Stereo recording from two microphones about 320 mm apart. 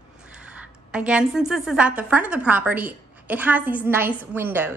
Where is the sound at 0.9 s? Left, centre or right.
Centre.